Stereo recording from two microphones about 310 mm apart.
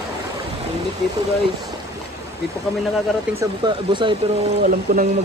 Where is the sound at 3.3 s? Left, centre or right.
Centre.